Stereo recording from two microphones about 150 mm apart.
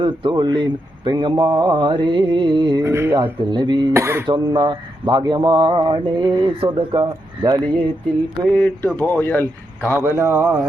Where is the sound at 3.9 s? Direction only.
20° right (ahead or behind).